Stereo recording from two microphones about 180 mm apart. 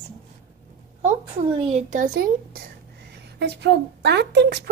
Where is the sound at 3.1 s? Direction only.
70° right (ahead or behind).